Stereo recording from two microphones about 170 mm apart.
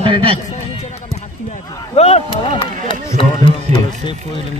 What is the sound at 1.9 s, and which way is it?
A man's voice, 40° left (ahead or behind).